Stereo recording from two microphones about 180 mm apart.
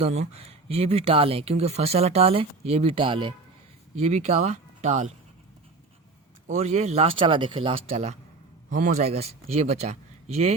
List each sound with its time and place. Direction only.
0.0 s speech: 35° right (ahead or behind)
6.5 s speech: 40° right (ahead or behind)